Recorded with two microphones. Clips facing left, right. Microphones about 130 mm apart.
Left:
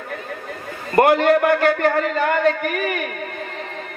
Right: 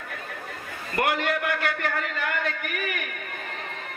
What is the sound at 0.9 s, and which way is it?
A man's voice, 40° left (ahead or behind).